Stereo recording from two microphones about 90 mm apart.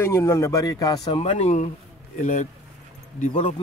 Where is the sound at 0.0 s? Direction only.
30° left (ahead or behind).